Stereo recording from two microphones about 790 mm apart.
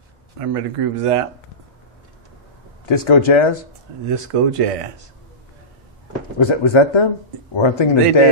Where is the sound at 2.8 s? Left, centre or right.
Left.